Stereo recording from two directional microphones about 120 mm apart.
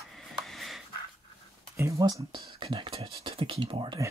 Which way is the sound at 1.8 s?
25° right (ahead or behind).